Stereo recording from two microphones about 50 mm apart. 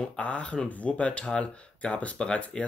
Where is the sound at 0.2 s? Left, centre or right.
Left.